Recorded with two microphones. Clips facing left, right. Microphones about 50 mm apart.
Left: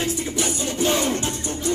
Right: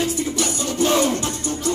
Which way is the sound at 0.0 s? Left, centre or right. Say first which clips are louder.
Right 2 dB; centre.